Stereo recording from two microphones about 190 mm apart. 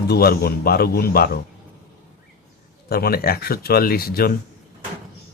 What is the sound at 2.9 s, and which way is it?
Speech, 55° left (ahead or behind).